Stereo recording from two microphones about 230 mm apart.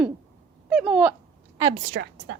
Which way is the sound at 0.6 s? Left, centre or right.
Centre.